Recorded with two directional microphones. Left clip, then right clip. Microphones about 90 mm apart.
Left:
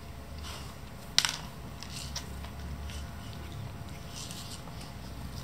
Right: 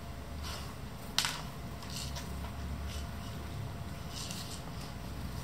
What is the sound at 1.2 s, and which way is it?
Computer keyboard, 30° left (ahead or behind).